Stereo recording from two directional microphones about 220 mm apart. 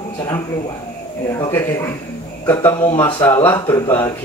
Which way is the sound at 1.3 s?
15° left (ahead or behind).